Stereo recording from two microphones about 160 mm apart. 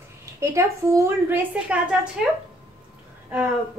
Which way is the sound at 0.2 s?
20° right (ahead or behind).